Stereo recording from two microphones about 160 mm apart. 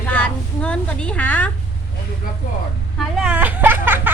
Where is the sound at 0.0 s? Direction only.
10° left (ahead or behind).